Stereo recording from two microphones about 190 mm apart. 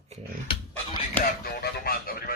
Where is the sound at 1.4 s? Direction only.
50° left (ahead or behind).